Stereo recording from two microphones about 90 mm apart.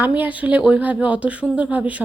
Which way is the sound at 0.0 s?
15° right (ahead or behind).